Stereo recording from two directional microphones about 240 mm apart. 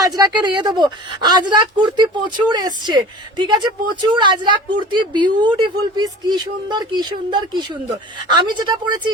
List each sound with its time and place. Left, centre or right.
0.0 s a woman's voice: centre